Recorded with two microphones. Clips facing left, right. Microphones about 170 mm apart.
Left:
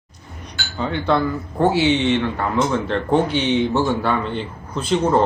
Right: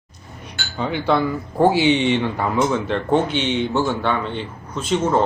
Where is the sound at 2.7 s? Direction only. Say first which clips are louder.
Even; 5° right (ahead or behind).